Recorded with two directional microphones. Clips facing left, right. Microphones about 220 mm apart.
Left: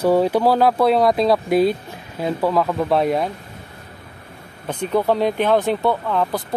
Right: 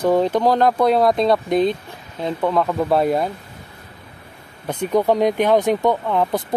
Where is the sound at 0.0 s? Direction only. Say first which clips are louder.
Left 1 dB; 10° left (ahead or behind).